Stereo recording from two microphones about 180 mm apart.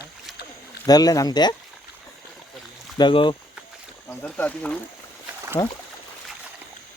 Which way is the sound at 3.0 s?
25° left (ahead or behind).